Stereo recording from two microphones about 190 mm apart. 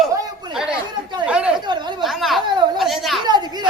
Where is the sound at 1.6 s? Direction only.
25° right (ahead or behind).